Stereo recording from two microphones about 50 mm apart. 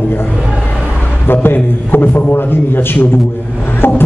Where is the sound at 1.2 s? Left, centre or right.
Left.